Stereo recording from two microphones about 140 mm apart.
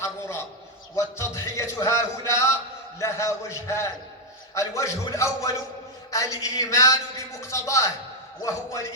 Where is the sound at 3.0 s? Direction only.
20° left (ahead or behind).